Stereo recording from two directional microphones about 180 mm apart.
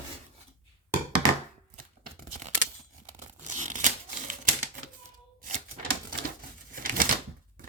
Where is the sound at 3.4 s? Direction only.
40° right (ahead or behind).